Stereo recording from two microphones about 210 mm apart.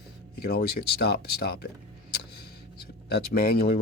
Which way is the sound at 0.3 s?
45° left (ahead or behind).